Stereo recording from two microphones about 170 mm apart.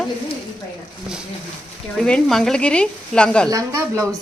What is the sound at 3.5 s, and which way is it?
Speech, 20° right (ahead or behind).